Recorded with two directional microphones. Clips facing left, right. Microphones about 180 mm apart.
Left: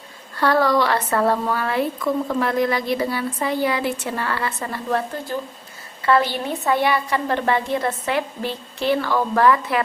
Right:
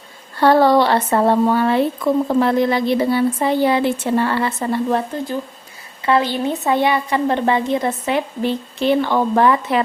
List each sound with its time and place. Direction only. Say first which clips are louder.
0.3 s speech: right 5 dB; 25° right (ahead or behind)